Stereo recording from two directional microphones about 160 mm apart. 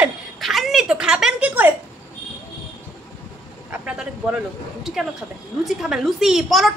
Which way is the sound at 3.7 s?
5° right (ahead or behind).